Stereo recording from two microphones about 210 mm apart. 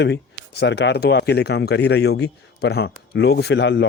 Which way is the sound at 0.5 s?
55° left (ahead or behind).